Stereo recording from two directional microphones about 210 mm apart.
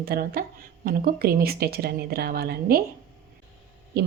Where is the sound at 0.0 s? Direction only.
45° right (ahead or behind).